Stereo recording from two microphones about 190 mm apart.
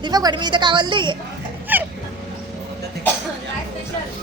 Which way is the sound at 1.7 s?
10° right (ahead or behind).